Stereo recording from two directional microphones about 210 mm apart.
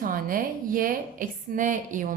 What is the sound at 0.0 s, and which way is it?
A woman's voice, 40° right (ahead or behind).